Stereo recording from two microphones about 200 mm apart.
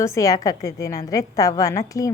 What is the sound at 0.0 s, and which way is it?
A woman's voice, 15° left (ahead or behind).